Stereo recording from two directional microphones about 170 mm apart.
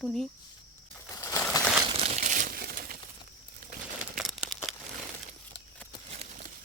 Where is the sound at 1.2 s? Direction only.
15° left (ahead or behind).